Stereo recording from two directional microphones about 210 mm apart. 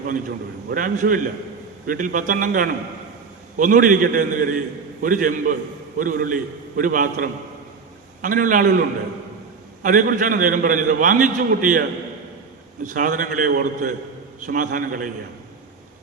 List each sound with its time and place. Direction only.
0.7 s a man's voice: 40° right (ahead or behind)
9.8 s a man's voice: 40° right (ahead or behind)